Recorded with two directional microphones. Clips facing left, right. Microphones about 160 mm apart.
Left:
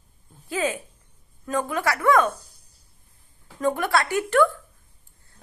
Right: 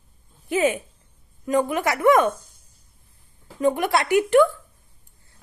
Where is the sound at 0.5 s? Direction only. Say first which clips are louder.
Right 5 dB; 20° right (ahead or behind).